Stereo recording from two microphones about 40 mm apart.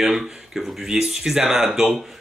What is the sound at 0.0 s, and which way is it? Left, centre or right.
Speech, centre.